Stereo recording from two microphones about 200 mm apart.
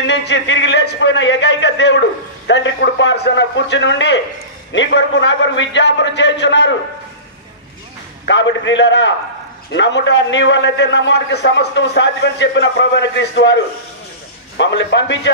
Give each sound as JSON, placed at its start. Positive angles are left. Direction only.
{"t": 0.0, "sound": "a man's voice", "side_deg": 60}
{"t": 8.3, "sound": "a man's voice", "side_deg": 65}
{"t": 14.6, "sound": "a man's voice", "side_deg": 60}